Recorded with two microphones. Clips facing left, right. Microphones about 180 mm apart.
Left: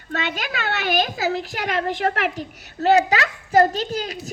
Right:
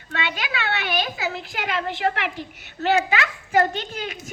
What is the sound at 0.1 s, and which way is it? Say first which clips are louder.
A woman's voice: left 2 dB; 45° left (ahead or behind).